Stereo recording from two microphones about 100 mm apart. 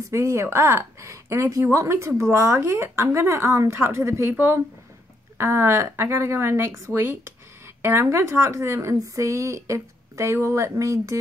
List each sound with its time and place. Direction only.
0.0 s speech: 30° right (ahead or behind)